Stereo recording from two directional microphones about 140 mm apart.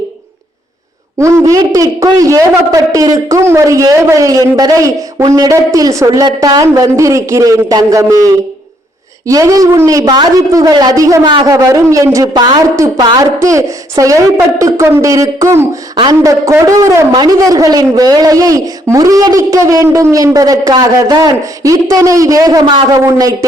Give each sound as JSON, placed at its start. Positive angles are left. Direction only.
{"t": 1.2, "sound": "speech", "side_deg": -20}